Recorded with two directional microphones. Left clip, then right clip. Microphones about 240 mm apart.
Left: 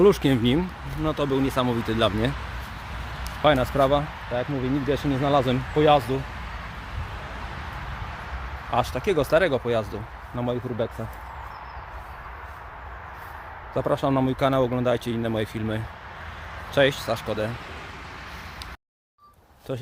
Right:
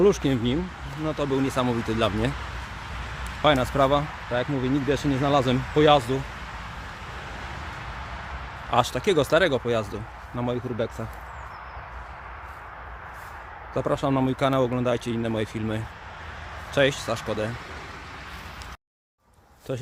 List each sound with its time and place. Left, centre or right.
0.0 s speech: centre
3.4 s speech: centre
4.3 s speech: centre
4.9 s speech: centre
8.7 s speech: right; by 10.9 s centre
13.7 s speech: centre